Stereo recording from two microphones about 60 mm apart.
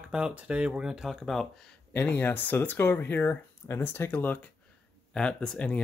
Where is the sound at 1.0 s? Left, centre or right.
Centre.